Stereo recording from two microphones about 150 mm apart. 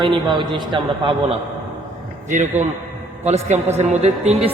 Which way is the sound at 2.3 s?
55° right (ahead or behind).